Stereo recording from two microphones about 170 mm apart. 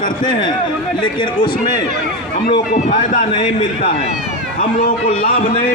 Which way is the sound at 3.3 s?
30° left (ahead or behind).